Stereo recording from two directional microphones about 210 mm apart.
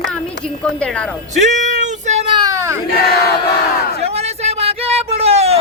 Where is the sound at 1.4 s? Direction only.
35° right (ahead or behind).